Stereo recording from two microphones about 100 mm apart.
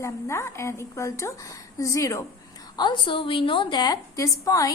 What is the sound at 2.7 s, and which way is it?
A woman's voice, 50° left (ahead or behind).